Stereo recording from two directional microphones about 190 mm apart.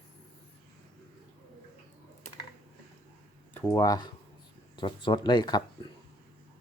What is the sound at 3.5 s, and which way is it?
Speech, 15° left (ahead or behind).